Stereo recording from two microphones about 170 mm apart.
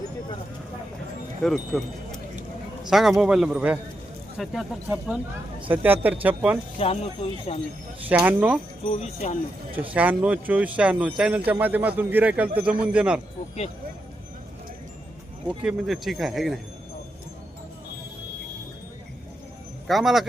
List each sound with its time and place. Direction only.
1.5 s a man's voice: centre (ahead or behind)
6.7 s speech: 35° left (ahead or behind)
8.0 s a man's voice: 10° right (ahead or behind)
8.9 s speech: 40° left (ahead or behind)
9.9 s a man's voice: 10° right (ahead or behind)
15.4 s speech: centre (ahead or behind)
19.9 s speech: centre (ahead or behind)